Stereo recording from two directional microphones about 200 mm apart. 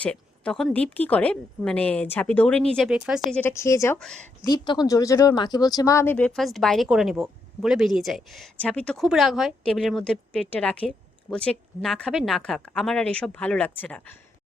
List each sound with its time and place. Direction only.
0.0 s a woman's voice: 5° left (ahead or behind)